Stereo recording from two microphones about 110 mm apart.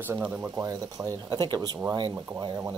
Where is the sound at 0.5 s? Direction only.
35° right (ahead or behind).